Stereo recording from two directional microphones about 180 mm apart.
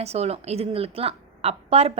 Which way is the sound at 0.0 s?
35° right (ahead or behind).